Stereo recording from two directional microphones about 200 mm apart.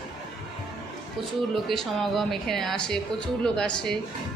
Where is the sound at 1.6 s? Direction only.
Centre (ahead or behind).